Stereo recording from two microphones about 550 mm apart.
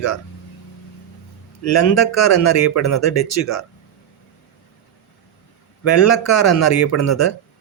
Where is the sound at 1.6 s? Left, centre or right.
Left.